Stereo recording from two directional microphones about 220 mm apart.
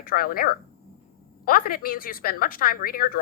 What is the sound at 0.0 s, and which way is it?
A woman's voice, 40° left (ahead or behind).